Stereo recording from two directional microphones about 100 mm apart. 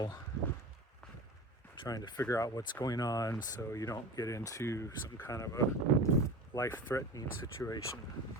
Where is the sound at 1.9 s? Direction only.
40° left (ahead or behind).